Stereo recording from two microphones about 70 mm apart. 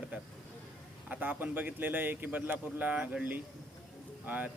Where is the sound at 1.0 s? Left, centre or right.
Right.